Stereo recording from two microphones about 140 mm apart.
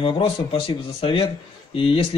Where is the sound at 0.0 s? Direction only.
40° left (ahead or behind).